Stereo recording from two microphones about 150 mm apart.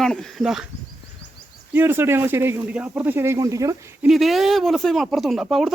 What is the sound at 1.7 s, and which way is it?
Speech, 15° right (ahead or behind).